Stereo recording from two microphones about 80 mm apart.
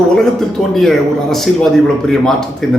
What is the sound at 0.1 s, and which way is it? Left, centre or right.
A man's voice, centre.